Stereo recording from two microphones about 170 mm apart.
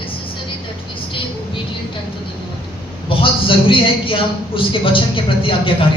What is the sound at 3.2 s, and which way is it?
A man's voice, 30° left (ahead or behind).